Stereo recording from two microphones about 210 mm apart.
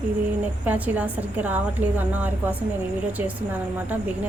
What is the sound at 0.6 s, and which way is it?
A woman's voice, 10° right (ahead or behind).